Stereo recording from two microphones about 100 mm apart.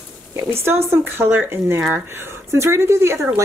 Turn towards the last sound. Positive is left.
turn(degrees=-25)  # may be behind; listen again after turning